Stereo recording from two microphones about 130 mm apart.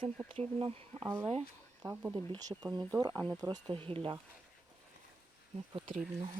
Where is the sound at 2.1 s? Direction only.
35° right (ahead or behind).